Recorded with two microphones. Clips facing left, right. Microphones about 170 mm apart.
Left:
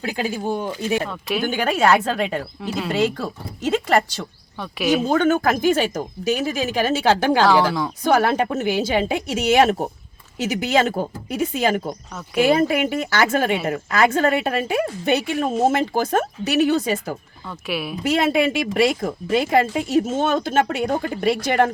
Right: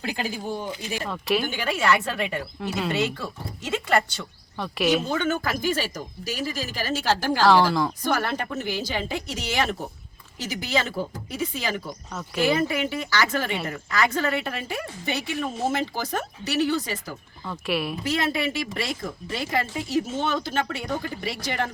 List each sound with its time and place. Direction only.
0.4 s speech: 70° left (ahead or behind)
1.0 s a woman's voice: centre (ahead or behind)
1.5 s a woman's voice: 50° left (ahead or behind)
2.0 s speech: 40° left (ahead or behind)
2.6 s a woman's voice: centre (ahead or behind)
2.9 s speech: 40° left (ahead or behind)
4.6 s a woman's voice: centre (ahead or behind)
5.1 s a woman's voice: 50° left (ahead or behind); by 7.4 s 70° left (ahead or behind)
7.4 s a woman's voice: centre (ahead or behind)
8.0 s a woman's voice: 65° left (ahead or behind)
17.7 s a woman's voice: centre (ahead or behind)
18.2 s a woman's voice: 60° left (ahead or behind)
20.1 s a woman's voice: 50° left (ahead or behind)
20.9 s a woman's voice: 60° left (ahead or behind)